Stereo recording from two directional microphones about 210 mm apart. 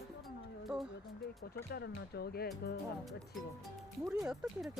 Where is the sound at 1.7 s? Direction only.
50° left (ahead or behind).